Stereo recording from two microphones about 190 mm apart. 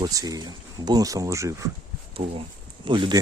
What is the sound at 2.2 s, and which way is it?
Speech, 30° right (ahead or behind).